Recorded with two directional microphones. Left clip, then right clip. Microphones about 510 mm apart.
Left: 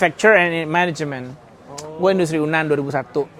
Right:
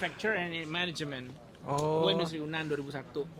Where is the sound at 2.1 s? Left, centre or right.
Left.